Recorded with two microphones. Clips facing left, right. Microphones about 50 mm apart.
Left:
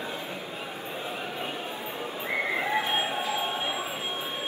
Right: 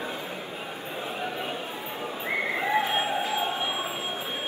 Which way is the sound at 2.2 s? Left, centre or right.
Right.